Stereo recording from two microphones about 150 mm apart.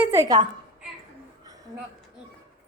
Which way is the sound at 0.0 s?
20° right (ahead or behind).